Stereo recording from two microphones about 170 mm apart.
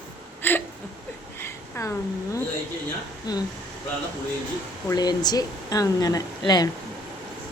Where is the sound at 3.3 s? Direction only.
20° left (ahead or behind).